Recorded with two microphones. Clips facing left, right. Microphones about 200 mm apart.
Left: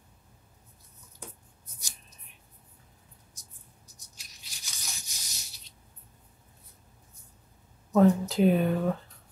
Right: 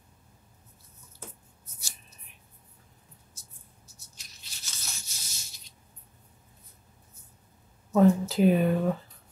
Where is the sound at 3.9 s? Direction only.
15° left (ahead or behind).